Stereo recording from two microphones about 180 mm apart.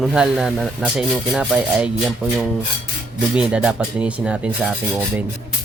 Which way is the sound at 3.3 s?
5° right (ahead or behind).